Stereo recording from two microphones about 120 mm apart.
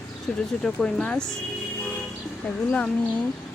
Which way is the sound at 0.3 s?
5° left (ahead or behind).